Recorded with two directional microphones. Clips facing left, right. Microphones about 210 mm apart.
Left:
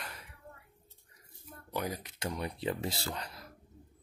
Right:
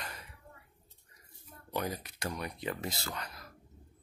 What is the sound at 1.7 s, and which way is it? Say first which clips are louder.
Speech: even; 10° left (ahead or behind).